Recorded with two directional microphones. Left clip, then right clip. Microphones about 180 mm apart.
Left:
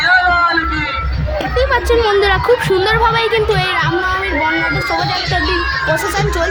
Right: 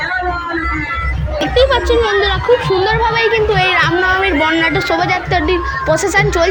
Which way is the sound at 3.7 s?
20° right (ahead or behind).